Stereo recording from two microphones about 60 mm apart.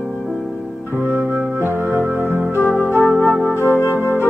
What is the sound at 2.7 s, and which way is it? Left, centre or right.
Music, left.